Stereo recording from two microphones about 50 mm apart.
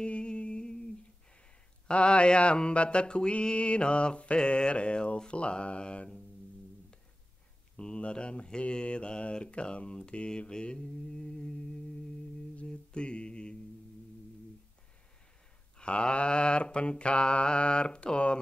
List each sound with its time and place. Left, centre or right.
0.0 s music: centre
1.9 s mantra: left
7.7 s mantra: left
12.6 s mantra: centre
15.8 s mantra: centre